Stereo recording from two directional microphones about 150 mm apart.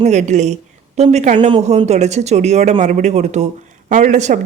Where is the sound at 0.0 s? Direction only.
50° right (ahead or behind).